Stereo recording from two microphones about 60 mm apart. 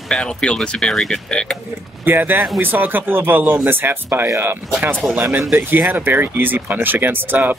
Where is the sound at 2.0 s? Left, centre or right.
Right.